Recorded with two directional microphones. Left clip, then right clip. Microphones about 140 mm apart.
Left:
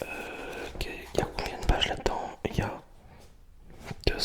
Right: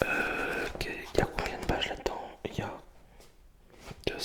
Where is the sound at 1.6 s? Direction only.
15° left (ahead or behind).